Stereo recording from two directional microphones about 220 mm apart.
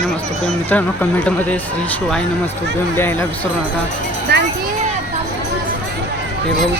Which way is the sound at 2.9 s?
10° left (ahead or behind).